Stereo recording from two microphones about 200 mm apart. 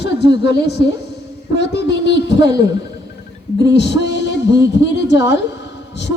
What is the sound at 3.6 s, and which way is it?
A woman's voice, 60° left (ahead or behind).